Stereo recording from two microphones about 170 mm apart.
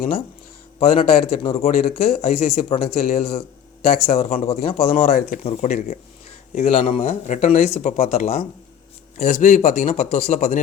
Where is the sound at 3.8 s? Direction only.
50° left (ahead or behind).